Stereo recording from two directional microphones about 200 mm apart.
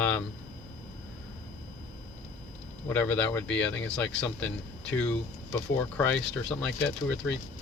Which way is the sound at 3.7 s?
65° left (ahead or behind).